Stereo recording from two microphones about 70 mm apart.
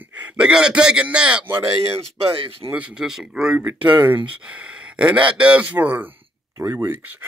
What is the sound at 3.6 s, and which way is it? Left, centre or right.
Speech, right.